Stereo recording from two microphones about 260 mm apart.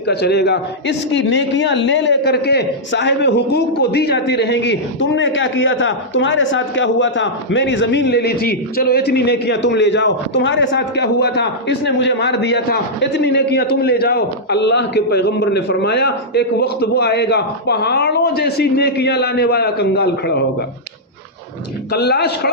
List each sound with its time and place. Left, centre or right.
0.1 s a man's voice: left
21.9 s a man's voice: left